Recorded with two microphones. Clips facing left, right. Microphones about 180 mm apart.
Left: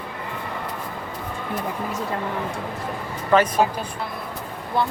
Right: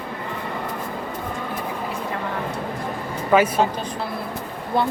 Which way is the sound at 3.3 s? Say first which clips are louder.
Right 1 dB; 10° right (ahead or behind).